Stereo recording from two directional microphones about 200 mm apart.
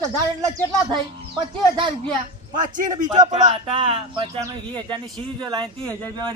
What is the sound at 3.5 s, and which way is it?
Speech, 25° right (ahead or behind).